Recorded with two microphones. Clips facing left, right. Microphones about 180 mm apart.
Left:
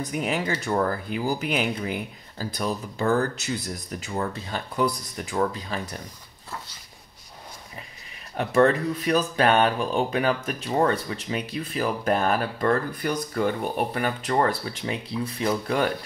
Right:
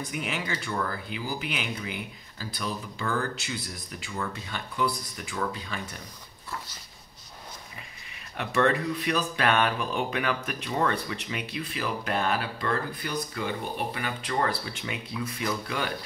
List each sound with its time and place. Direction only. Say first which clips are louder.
0.0 s speech: left 6 dB; 40° left (ahead or behind)
8.4 s speech: left 5 dB; 35° left (ahead or behind)